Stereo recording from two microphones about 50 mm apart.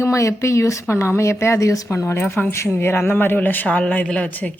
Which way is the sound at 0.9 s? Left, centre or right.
Left.